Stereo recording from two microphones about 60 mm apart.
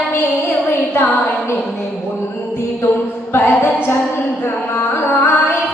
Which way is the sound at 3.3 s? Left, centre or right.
Left.